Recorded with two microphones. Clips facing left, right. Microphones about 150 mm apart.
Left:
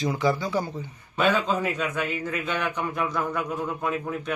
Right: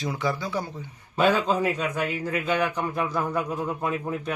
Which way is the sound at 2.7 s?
30° right (ahead or behind).